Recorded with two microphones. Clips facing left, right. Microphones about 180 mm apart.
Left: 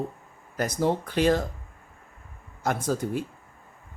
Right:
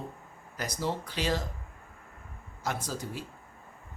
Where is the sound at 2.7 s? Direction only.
55° left (ahead or behind).